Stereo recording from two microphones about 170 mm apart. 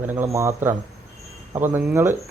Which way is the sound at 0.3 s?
15° right (ahead or behind).